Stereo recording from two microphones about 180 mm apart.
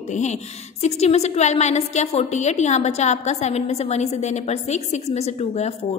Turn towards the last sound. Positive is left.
turn(degrees=35)  # may be behind; listen again after turning